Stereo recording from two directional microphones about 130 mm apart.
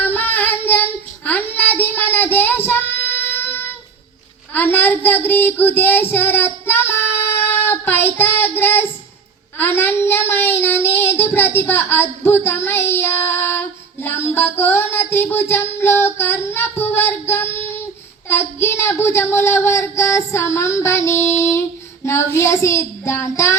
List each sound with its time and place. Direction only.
0.0 s child singing: 15° left (ahead or behind)